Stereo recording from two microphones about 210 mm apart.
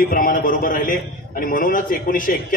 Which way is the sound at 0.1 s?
40° left (ahead or behind).